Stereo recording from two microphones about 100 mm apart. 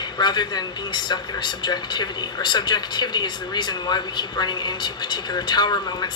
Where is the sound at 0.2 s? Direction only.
45° left (ahead or behind).